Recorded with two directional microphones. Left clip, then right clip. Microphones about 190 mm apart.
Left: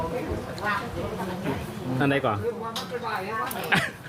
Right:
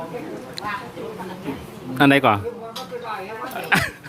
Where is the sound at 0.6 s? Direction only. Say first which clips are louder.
Left 1 dB; 50° right (ahead or behind).